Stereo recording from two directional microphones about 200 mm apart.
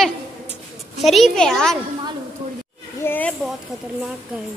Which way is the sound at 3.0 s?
10° left (ahead or behind).